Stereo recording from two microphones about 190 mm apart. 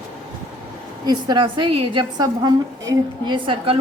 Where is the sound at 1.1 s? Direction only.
25° right (ahead or behind).